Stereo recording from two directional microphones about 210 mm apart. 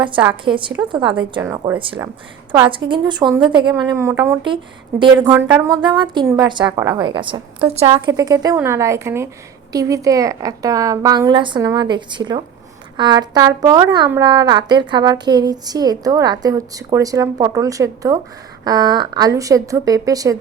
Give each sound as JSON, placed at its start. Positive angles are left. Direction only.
{"t": 0.4, "sound": "a woman's voice", "side_deg": -25}
{"t": 5.3, "sound": "a woman's voice", "side_deg": -10}